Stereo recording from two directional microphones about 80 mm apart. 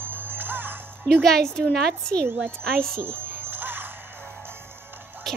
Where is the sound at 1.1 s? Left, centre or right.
Centre.